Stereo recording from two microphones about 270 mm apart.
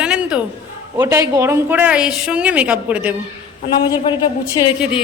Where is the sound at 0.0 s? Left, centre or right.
Centre.